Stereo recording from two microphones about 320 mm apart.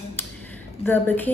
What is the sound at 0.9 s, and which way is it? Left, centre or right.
Speech, centre.